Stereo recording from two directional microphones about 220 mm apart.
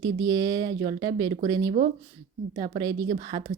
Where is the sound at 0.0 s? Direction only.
20° right (ahead or behind).